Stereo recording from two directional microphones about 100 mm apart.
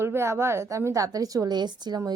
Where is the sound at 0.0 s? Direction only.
25° right (ahead or behind).